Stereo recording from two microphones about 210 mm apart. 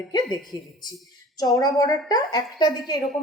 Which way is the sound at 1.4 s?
20° left (ahead or behind).